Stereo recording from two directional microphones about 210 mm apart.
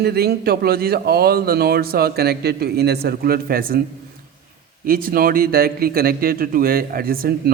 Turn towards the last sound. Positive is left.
turn(degrees=-45)  # may be behind; listen again after turning